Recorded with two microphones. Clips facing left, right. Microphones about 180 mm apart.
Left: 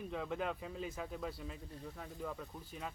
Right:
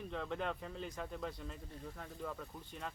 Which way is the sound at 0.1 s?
5° left (ahead or behind).